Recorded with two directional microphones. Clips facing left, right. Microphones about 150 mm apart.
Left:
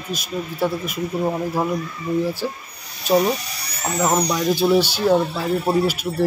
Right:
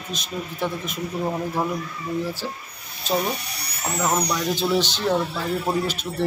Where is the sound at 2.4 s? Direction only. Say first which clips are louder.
Left 5 dB; 15° left (ahead or behind).